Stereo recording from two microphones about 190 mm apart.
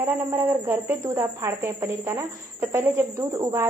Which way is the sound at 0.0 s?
15° right (ahead or behind).